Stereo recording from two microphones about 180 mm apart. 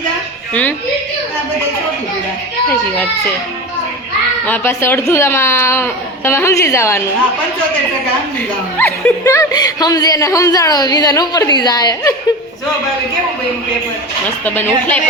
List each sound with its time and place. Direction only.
4.4 s speech: 10° left (ahead or behind)
8.8 s a woman's voice: 15° left (ahead or behind)
14.4 s speech: 10° left (ahead or behind)